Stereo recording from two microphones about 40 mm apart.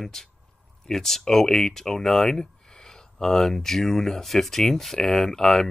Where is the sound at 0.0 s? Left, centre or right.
Centre.